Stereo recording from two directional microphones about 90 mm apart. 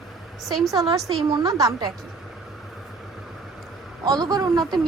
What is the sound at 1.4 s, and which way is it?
Speech, 40° right (ahead or behind).